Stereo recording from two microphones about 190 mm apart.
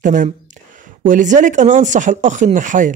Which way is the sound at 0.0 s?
40° right (ahead or behind).